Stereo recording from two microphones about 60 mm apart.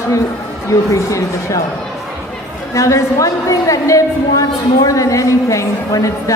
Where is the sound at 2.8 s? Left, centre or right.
Left.